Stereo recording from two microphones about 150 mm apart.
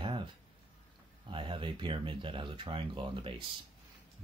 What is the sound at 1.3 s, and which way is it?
Speech, 35° right (ahead or behind).